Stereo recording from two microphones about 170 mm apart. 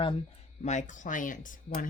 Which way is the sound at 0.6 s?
45° left (ahead or behind).